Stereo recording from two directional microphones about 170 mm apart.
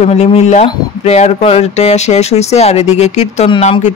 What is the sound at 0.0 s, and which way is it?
Speech, 40° left (ahead or behind).